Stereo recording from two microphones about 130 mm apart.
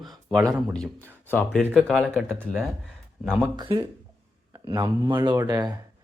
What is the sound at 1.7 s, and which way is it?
Speech, centre (ahead or behind).